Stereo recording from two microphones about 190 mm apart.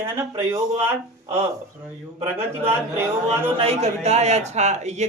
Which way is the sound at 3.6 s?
35° right (ahead or behind).